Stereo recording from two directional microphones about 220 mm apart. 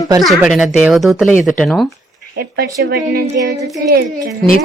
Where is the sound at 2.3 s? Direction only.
45° right (ahead or behind).